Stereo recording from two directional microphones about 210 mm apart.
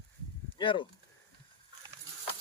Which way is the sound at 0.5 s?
25° left (ahead or behind).